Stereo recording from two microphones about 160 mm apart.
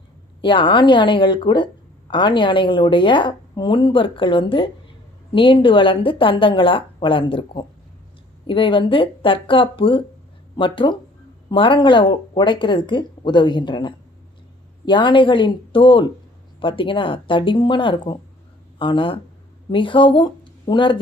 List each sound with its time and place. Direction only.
0.4 s a woman's voice: 30° left (ahead or behind)